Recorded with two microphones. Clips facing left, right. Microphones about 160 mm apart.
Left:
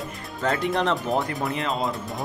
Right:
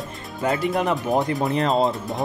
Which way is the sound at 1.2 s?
20° right (ahead or behind).